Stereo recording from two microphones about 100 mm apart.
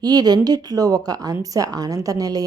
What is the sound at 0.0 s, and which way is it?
A woman's voice, 40° right (ahead or behind).